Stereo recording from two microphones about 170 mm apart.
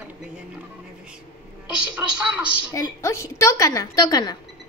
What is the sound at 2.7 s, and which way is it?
A woman's voice, 20° left (ahead or behind).